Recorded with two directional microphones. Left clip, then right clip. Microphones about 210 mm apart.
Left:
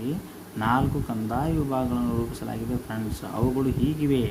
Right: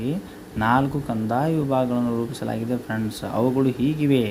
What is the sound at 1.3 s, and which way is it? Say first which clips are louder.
Speech: right 5 dB; 20° right (ahead or behind).